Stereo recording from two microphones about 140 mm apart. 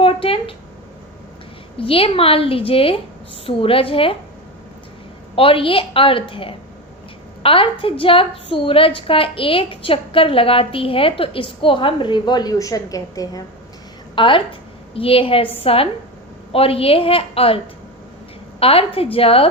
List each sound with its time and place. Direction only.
0.0 s a sound: 40° left (ahead or behind)
1.8 s a woman's voice: 40° left (ahead or behind)
5.4 s a woman's voice: 40° left (ahead or behind); by 13.4 s 25° left (ahead or behind)
14.2 s a woman's voice: 35° left (ahead or behind)
18.6 s a woman's voice: 45° left (ahead or behind)